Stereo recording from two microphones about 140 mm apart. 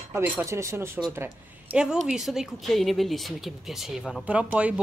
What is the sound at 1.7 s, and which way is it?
Speech, 5° right (ahead or behind).